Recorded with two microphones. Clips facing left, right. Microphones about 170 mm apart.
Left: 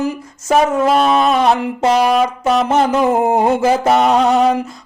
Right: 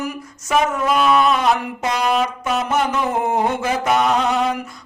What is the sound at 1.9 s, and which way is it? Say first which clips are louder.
Brass instrument: left 6 dB; 45° left (ahead or behind).